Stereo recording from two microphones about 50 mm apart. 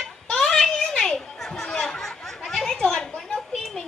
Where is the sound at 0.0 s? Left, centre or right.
Centre.